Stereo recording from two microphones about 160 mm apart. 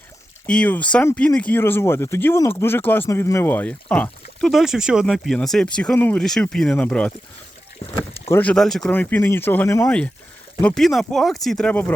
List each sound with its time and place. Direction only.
0.4 s speech: 10° left (ahead or behind)
8.3 s speech: 10° left (ahead or behind)